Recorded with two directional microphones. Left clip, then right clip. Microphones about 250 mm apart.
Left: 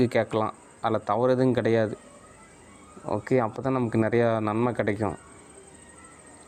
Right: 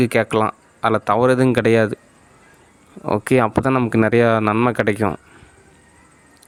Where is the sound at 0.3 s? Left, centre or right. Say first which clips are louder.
Right 9 dB; right.